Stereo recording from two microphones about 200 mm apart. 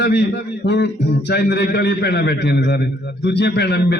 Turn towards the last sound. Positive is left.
turn(degrees=55)  # may be behind; listen again after turning